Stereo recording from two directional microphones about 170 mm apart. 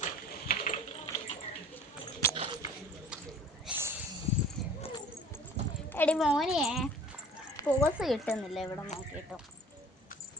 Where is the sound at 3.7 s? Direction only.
15° right (ahead or behind).